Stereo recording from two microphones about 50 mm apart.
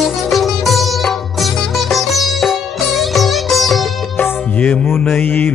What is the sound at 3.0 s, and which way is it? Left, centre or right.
Music, centre.